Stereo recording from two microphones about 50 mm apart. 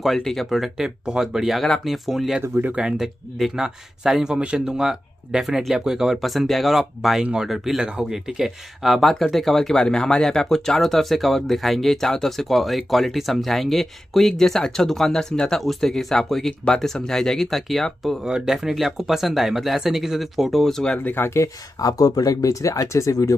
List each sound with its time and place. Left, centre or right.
0.0 s speech: centre
0.8 s speech: centre
2.7 s speech: centre
3.0 s speech: centre
4.4 s speech: right
6.1 s speech: centre
18.2 s speech: centre
21.0 s speech: left
22.6 s speech: left